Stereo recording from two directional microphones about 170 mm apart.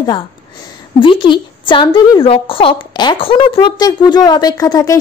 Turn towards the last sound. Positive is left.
turn(degrees=20)  # may be behind; listen again after turning